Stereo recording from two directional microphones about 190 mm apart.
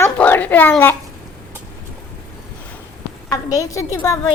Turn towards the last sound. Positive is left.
turn(degrees=15)  # may be behind; listen again after turning